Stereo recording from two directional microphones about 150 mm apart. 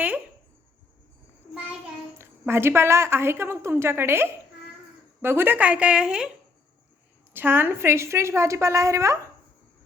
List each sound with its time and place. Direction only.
2.5 s a woman's voice: 15° right (ahead or behind)
7.3 s a woman's voice: 15° right (ahead or behind)